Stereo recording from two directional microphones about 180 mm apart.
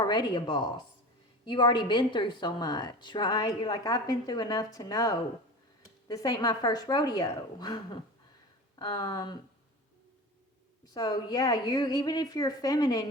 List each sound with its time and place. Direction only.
0.0 s a woman's voice: 25° left (ahead or behind)
10.9 s a woman's voice: 20° left (ahead or behind)